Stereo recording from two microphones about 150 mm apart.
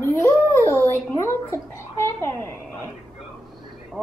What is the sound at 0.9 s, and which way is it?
A child's voice, 20° left (ahead or behind).